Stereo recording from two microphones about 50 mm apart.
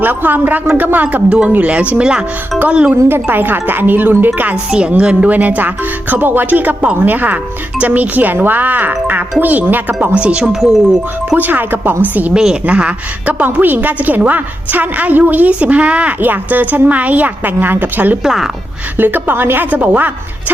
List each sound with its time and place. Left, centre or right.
0.0 s a woman's voice: right
3.1 s a woman's voice: right
4.7 s speech: right
5.3 s a woman's voice: right
10.2 s speech: right
10.8 s speech: centre
11.3 s a woman's voice: right
12.3 s speech: centre
12.6 s a woman's voice: right
18.2 s speech: centre
18.9 s a woman's voice: right
19.7 s a woman's voice: right